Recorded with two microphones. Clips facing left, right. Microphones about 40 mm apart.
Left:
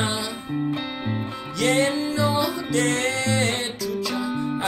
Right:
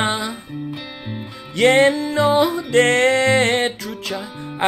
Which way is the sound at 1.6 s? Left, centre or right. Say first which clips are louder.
Right 7 dB; right.